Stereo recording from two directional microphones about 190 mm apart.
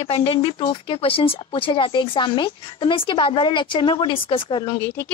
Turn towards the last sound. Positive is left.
turn(degrees=25)  # may be behind; listen again after turning